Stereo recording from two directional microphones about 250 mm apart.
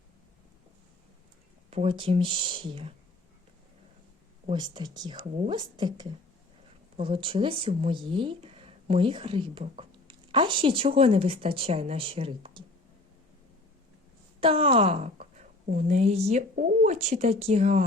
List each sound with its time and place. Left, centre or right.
1.7 s speech: right
4.4 s speech: centre
14.4 s a woman's voice: right